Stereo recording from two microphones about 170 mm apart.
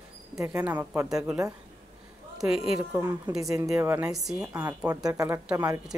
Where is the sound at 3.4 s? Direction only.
20° right (ahead or behind).